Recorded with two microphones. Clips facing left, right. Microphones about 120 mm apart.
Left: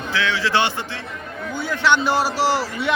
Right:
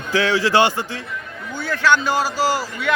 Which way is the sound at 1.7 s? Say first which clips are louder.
Right 1 dB; 20° left (ahead or behind).